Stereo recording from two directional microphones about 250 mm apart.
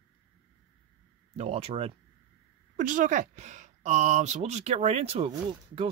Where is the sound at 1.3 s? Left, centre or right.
Right.